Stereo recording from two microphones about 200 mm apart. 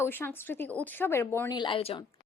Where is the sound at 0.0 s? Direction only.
10° left (ahead or behind); by 2.0 s 25° left (ahead or behind).